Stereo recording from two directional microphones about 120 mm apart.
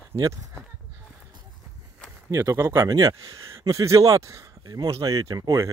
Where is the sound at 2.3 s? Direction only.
25° right (ahead or behind).